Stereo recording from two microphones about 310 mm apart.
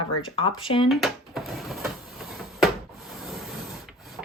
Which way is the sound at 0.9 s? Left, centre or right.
Centre.